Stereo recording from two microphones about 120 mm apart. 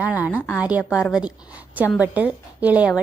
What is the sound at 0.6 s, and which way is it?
Speech, 10° right (ahead or behind).